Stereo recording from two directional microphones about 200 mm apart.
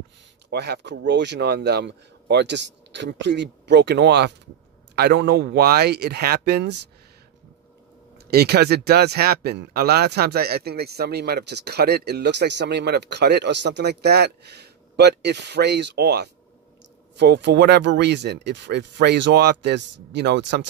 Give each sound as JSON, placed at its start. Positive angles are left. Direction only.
{"t": 0.5, "sound": "speech", "side_deg": -55}
{"t": 8.2, "sound": "speech", "side_deg": -55}